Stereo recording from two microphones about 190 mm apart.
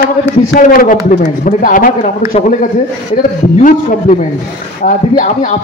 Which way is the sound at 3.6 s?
40° left (ahead or behind).